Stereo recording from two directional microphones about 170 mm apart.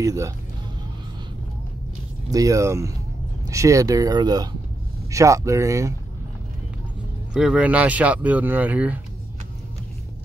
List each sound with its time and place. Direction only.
0.0 s speech: 20° right (ahead or behind)
2.3 s speech: 20° right (ahead or behind)
7.3 s speech: 5° right (ahead or behind)